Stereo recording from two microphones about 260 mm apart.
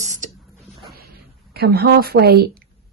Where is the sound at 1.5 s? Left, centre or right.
Right.